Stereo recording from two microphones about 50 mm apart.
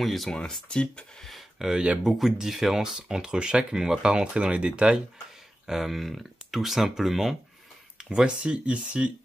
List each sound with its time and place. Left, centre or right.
0.0 s speech: centre
0.3 s speech: centre
1.6 s speech: centre
5.7 s speech: centre
8.0 s speech: centre